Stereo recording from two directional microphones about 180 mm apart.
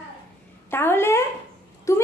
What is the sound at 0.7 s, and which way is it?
A woman's voice, 10° left (ahead or behind).